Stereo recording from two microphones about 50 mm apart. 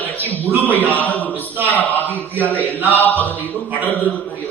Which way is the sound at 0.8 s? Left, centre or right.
Left.